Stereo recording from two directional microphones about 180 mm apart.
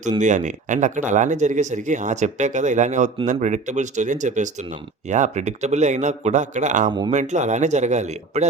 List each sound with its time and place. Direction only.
0.2 s speech: 40° right (ahead or behind)